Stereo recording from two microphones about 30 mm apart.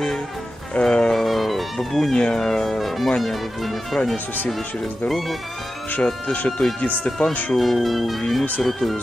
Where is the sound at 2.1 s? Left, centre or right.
Left.